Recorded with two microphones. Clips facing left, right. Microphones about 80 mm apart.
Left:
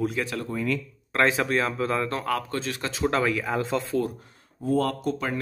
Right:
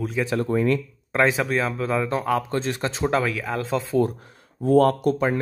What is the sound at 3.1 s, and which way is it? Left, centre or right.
Speech, centre.